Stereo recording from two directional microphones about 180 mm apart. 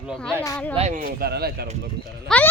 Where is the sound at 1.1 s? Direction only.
60° right (ahead or behind).